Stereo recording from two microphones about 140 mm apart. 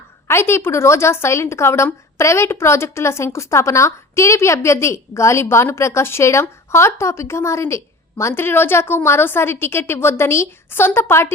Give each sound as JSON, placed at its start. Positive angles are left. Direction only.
{"t": 0.3, "sound": "a woman's voice", "side_deg": 20}